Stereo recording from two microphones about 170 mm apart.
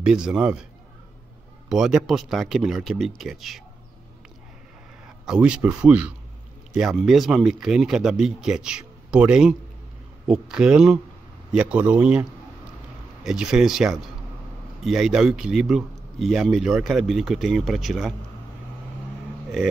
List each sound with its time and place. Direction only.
0.0 s a man's voice: 5° right (ahead or behind)
1.7 s a man's voice: centre (ahead or behind)
5.0 s a man's voice: 5° right (ahead or behind)